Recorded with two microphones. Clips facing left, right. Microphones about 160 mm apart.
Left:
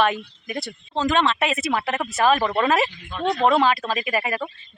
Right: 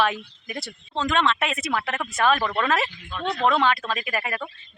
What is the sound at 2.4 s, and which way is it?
Speech, 20° left (ahead or behind).